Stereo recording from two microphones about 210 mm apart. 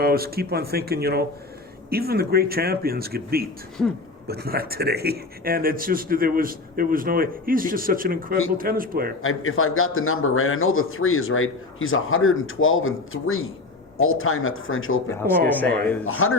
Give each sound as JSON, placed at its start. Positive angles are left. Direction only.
{"t": 0.0, "sound": "a man's voice", "side_deg": -45}
{"t": 3.8, "sound": "speech", "side_deg": 0}
{"t": 4.3, "sound": "a man's voice", "side_deg": -50}
{"t": 9.2, "sound": "a man's voice", "side_deg": 80}
{"t": 15.1, "sound": "speech", "side_deg": 10}
{"t": 16.0, "sound": "speech", "side_deg": 90}